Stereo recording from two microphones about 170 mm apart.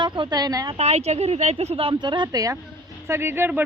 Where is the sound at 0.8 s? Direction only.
40° right (ahead or behind).